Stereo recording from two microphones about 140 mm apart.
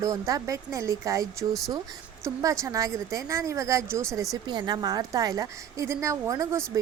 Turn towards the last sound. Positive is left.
turn(degrees=-25)  # may be behind; listen again after turning